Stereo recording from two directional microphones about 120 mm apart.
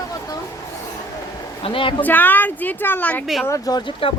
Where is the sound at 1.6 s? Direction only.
45° left (ahead or behind).